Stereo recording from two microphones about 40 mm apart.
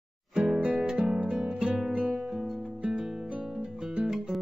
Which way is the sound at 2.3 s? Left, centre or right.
Centre.